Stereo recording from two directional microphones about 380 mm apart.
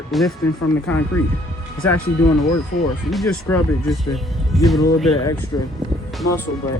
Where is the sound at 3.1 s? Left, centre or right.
Centre.